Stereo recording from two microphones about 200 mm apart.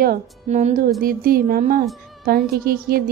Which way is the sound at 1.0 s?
45° right (ahead or behind).